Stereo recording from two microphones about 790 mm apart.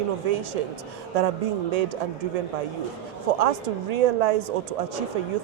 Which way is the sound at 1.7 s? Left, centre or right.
Right.